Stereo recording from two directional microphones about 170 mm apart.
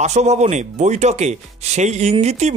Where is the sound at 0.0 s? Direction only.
40° right (ahead or behind).